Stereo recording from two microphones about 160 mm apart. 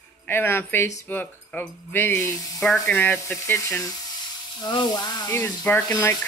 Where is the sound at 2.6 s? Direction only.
5° left (ahead or behind).